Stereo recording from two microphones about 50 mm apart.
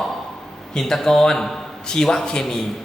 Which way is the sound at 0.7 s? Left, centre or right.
Centre.